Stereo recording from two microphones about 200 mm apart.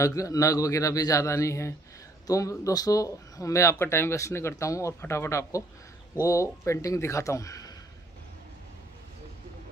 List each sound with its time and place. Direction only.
0.0 s speech: 15° left (ahead or behind)